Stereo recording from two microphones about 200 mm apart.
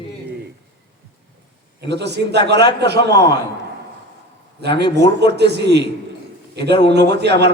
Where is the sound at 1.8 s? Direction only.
55° right (ahead or behind).